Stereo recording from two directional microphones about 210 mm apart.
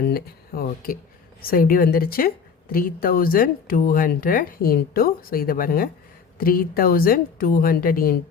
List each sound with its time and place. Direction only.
0.0 s speech: 45° left (ahead or behind)